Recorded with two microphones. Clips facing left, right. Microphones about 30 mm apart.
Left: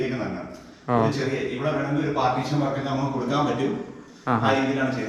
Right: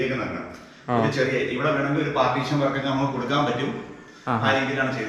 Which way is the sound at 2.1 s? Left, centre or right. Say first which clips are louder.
Right 1 dB; right.